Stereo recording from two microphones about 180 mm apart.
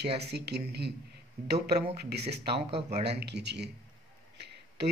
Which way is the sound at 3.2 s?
65° right (ahead or behind).